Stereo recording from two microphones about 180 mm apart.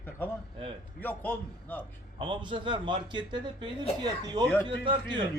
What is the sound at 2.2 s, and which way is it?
A man's voice, 25° right (ahead or behind).